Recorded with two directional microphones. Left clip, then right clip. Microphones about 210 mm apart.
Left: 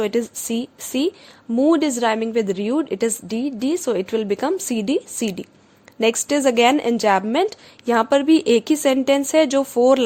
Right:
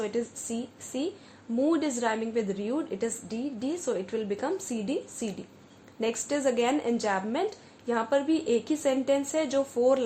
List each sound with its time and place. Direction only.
0.0 s speech: 50° left (ahead or behind)